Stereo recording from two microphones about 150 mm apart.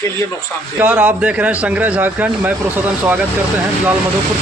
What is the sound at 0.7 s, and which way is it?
A man's voice, 10° right (ahead or behind).